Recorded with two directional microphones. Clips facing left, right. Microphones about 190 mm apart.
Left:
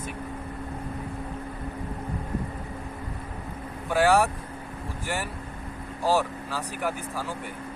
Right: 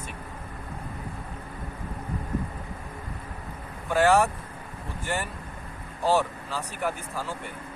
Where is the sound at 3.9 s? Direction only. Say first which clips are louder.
Even; 15° left (ahead or behind).